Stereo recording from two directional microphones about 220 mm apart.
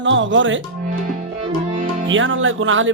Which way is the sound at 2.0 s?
60° right (ahead or behind).